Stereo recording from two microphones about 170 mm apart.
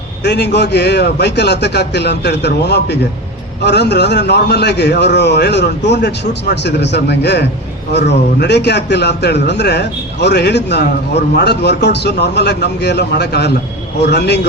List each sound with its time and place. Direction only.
0.3 s a man's voice: 85° left